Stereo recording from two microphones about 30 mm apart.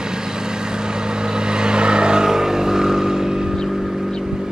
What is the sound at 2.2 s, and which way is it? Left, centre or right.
Vehicle, centre.